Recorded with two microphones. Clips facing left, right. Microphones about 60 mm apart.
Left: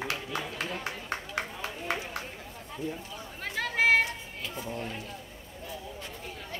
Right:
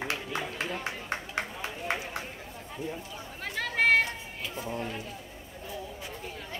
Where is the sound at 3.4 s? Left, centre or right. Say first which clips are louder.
Even; centre.